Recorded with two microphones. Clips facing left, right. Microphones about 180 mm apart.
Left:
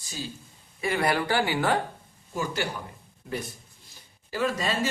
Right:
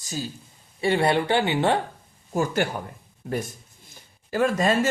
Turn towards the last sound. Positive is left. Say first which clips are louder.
# right 6 dB
turn(degrees=-50)  # may be behind; listen again after turning